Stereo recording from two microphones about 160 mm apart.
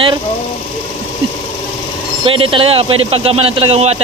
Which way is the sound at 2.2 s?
35° right (ahead or behind).